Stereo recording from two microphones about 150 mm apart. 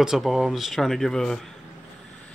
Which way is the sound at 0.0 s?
Centre (ahead or behind).